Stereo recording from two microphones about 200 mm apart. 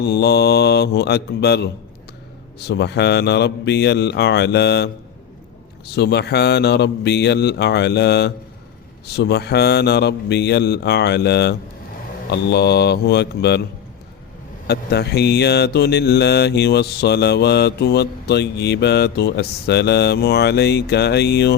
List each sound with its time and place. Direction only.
0.0 s mantra: 55° left (ahead or behind)
14.7 s mantra: 55° left (ahead or behind)